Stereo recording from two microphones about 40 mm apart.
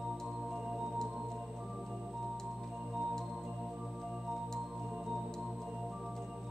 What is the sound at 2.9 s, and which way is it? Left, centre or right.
Organ, centre.